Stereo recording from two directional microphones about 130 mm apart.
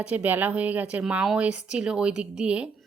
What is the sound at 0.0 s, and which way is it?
A woman's voice, 10° right (ahead or behind).